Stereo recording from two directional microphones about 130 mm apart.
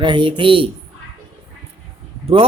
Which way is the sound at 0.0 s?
35° right (ahead or behind).